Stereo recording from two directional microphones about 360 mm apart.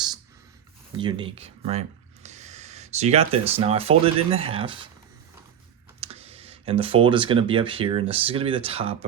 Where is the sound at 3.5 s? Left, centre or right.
Centre.